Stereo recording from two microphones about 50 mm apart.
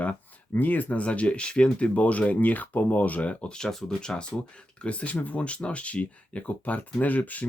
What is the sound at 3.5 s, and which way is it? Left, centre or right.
Speech, centre.